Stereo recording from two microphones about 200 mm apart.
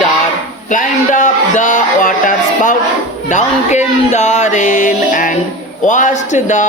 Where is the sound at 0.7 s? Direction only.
40° left (ahead or behind).